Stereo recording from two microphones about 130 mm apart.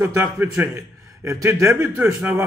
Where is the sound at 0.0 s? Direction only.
20° right (ahead or behind).